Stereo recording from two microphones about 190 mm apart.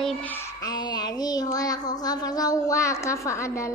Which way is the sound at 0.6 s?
20° left (ahead or behind).